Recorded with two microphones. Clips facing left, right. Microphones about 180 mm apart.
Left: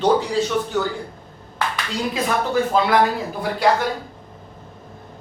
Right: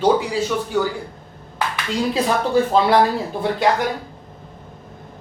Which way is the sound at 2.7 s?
30° right (ahead or behind).